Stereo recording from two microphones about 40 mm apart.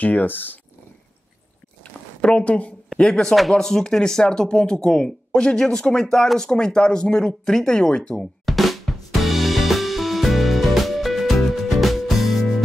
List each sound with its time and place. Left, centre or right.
0.0 s speech: left
1.8 s a sound: left
3.0 s speech: centre
8.5 s drum kit: centre